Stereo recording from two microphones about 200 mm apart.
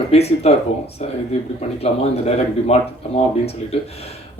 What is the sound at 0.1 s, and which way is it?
Speech, 30° left (ahead or behind).